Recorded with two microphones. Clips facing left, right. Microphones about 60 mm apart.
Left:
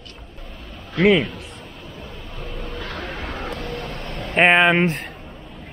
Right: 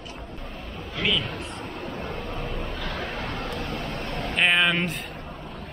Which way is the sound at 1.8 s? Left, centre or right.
Right.